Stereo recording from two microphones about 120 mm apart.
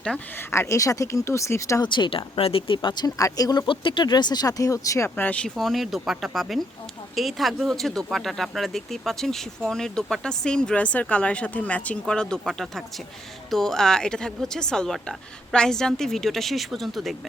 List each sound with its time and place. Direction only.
0.3 s speech: 20° left (ahead or behind)
1.8 s speech: 40° left (ahead or behind)
3.7 s speech: 40° left (ahead or behind); by 5.5 s 10° left (ahead or behind)
5.5 s speech: centre (ahead or behind)